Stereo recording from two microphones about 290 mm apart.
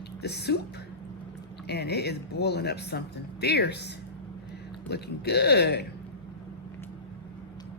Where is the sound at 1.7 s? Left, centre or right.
Left.